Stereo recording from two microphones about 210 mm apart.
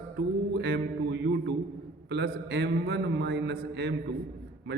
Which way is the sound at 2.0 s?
55° right (ahead or behind).